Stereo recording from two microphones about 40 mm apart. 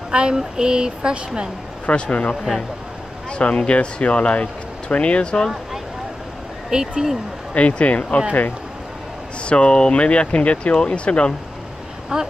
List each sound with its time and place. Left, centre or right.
0.1 s speech: right
1.9 s speech: left
6.7 s speech: right
7.5 s speech: left
9.4 s speech: left
12.1 s speech: centre